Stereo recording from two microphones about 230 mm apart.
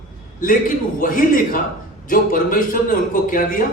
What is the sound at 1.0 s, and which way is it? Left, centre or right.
A man's voice, left.